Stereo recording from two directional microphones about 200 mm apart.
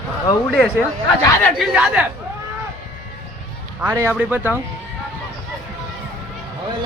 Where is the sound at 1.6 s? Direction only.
5° right (ahead or behind).